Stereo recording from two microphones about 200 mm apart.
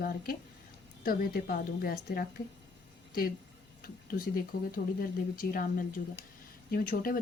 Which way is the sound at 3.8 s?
45° left (ahead or behind).